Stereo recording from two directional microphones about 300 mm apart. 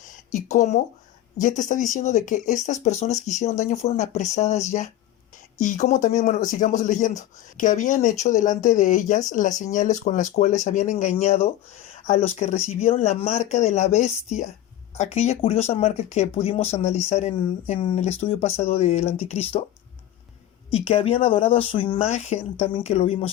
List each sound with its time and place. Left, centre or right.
0.3 s speech: left
20.7 s speech: centre